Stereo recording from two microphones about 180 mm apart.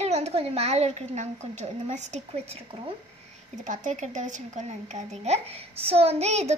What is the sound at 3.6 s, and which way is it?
A child's voice, 45° right (ahead or behind).